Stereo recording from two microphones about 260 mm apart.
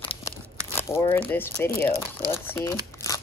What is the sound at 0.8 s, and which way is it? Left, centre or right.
Crumpling, centre.